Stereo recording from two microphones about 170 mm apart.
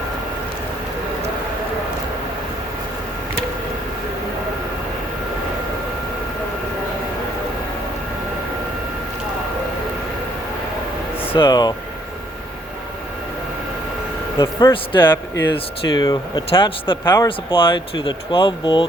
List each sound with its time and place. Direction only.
11.3 s speech: 25° left (ahead or behind)
14.3 s speech: 25° left (ahead or behind)
17.0 s speech: 10° left (ahead or behind)
17.2 s speech: 30° left (ahead or behind)